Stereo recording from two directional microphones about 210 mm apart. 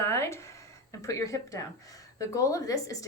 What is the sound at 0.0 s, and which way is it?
Speech, 10° left (ahead or behind).